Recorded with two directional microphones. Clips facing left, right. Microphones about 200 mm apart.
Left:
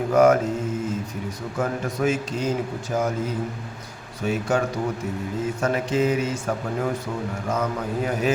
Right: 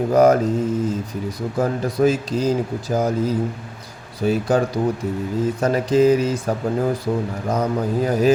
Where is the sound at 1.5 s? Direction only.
35° right (ahead or behind).